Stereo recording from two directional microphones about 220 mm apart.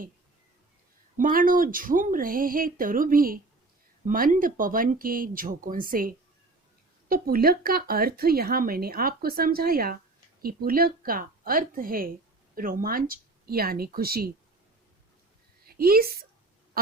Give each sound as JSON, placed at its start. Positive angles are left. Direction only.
{"t": 1.1, "sound": "speech", "side_deg": -40}
{"t": 15.6, "sound": "a woman's voice", "side_deg": -45}